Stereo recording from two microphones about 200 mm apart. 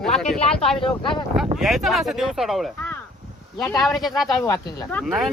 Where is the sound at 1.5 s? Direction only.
Centre (ahead or behind).